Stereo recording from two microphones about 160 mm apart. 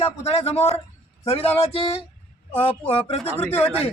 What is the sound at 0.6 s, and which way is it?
Speech, 15° left (ahead or behind).